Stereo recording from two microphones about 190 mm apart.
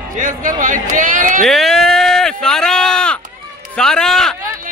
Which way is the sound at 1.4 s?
Centre (ahead or behind).